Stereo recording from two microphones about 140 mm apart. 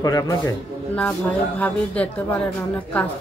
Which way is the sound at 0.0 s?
25° left (ahead or behind).